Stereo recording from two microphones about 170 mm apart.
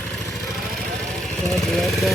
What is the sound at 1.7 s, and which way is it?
Vehicle, centre (ahead or behind).